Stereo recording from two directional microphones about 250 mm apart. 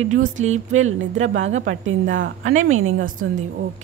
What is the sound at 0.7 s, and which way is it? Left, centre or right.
Speech, right.